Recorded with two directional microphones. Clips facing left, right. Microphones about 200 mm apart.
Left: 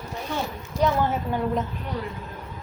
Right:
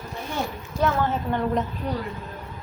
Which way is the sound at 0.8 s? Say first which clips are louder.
Left 1 dB; 15° left (ahead or behind).